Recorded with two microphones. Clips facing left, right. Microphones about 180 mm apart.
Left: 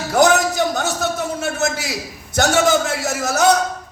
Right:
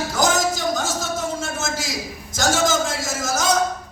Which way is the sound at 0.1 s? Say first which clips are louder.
Left 7 dB; 60° left (ahead or behind).